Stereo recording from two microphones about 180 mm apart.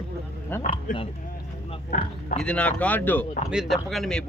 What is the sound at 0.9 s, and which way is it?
Speech, 50° left (ahead or behind).